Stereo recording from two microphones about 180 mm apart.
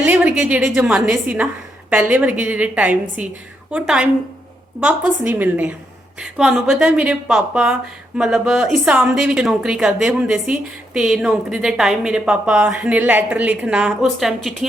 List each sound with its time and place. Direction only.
0.0 s a woman's voice: 10° right (ahead or behind)